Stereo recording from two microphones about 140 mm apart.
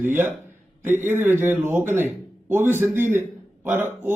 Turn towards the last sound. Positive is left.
turn(degrees=-15)  # may be behind; listen again after turning